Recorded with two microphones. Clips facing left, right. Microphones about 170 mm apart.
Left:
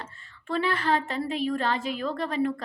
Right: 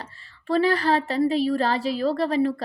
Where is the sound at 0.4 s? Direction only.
35° right (ahead or behind).